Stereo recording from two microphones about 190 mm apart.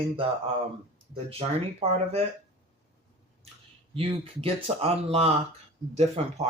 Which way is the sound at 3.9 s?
30° right (ahead or behind).